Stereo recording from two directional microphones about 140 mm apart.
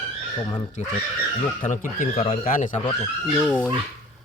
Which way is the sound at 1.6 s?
70° left (ahead or behind).